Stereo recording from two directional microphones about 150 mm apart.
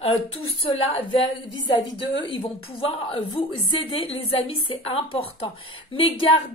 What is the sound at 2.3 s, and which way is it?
A woman's voice, 35° left (ahead or behind).